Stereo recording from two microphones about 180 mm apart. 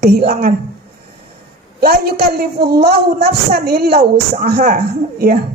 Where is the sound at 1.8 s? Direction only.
60° right (ahead or behind).